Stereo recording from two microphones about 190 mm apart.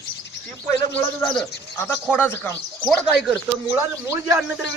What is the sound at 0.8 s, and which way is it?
Speech, 10° left (ahead or behind).